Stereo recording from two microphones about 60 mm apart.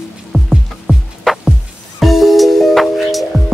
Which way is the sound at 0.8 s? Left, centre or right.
Centre.